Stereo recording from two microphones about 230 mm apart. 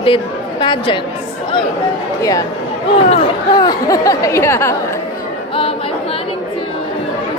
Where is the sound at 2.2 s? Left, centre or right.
Centre.